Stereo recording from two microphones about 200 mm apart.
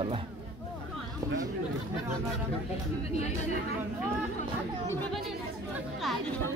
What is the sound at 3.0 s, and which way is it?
Speech, 30° left (ahead or behind).